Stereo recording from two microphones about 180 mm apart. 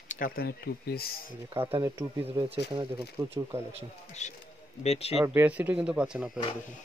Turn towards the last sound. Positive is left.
turn(degrees=-5)  # may be behind; listen again after turning